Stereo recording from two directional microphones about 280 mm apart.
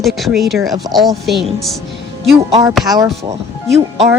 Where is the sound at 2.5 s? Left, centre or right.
Right.